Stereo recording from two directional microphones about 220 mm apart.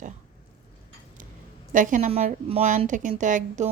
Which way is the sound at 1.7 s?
35° right (ahead or behind).